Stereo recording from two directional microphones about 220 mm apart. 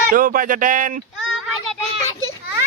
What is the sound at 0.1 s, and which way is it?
Speech, 40° right (ahead or behind).